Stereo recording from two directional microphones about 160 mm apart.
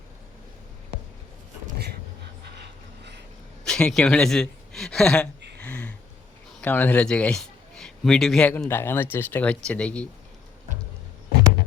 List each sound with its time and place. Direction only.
2.6 s music: 90° right
3.6 s speech: 5° left (ahead or behind)
5.5 s a sound: 10° left (ahead or behind)
6.6 s a man's voice: 10° left (ahead or behind)